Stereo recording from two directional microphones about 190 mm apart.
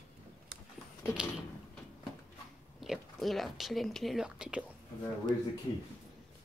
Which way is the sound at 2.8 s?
Centre (ahead or behind).